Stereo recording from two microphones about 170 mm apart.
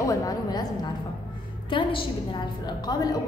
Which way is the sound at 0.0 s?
20° left (ahead or behind).